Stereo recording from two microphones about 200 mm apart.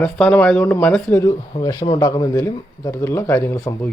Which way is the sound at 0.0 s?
5° left (ahead or behind).